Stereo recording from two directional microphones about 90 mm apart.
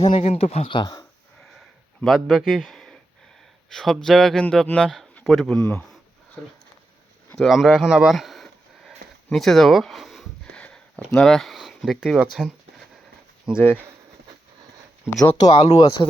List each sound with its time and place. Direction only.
0.0 s speech: 65° left (ahead or behind)
2.0 s a man's voice: centre (ahead or behind)
4.4 s a man's voice: 10° left (ahead or behind)
7.3 s a sound: centre (ahead or behind)
10.5 s a sound: 15° left (ahead or behind); by 12.2 s 5° right (ahead or behind)
15.2 s speech: 45° left (ahead or behind)